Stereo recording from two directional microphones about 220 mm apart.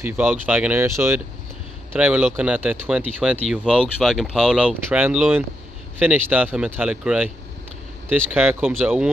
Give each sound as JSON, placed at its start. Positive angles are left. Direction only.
{"t": 0.0, "sound": "speech", "side_deg": -10}